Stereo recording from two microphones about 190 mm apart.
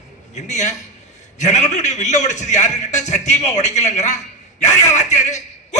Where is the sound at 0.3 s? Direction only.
40° left (ahead or behind).